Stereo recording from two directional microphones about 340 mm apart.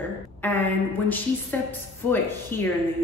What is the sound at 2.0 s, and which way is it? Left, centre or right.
Speech, centre.